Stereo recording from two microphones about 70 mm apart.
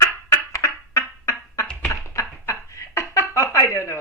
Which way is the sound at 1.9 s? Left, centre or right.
Left.